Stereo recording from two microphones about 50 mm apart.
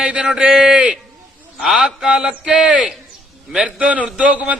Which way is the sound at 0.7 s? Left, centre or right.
Right.